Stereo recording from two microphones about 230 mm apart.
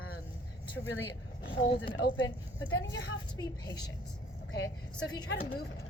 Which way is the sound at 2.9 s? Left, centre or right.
Left.